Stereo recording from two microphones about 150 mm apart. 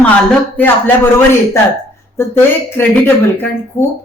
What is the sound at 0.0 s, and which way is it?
Speech, 10° left (ahead or behind).